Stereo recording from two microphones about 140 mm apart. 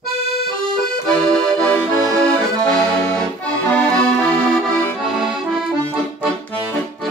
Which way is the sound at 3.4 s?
5° left (ahead or behind).